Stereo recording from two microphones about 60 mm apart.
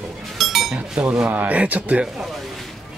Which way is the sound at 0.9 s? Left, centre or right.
Centre.